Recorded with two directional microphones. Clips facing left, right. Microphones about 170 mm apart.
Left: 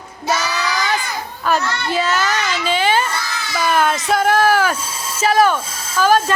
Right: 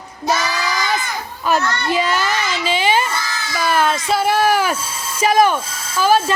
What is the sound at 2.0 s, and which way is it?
Baby cry, 10° right (ahead or behind).